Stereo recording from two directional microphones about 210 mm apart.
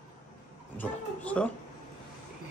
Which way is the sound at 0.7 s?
10° left (ahead or behind).